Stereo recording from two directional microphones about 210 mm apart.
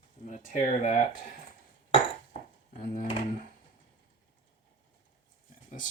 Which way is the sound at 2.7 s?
45° left (ahead or behind).